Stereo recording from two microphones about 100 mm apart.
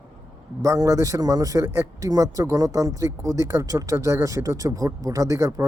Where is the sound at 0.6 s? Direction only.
30° right (ahead or behind).